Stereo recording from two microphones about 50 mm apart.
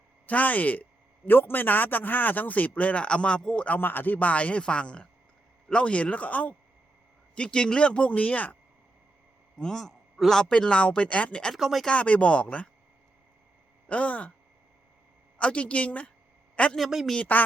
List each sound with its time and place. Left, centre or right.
0.3 s speech: left
3.8 s a man's voice: left
9.6 s a man's voice: centre
10.5 s a man's voice: left
11.5 s a man's voice: centre
11.9 s a man's voice: left
13.8 s a man's voice: left
15.4 s a man's voice: left
16.7 s a man's voice: centre
17.3 s speech: left